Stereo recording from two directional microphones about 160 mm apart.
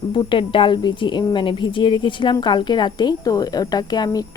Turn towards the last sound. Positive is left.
turn(degrees=25)  # may be behind; listen again after turning